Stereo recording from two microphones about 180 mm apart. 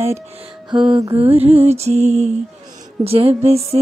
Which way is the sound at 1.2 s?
30° right (ahead or behind).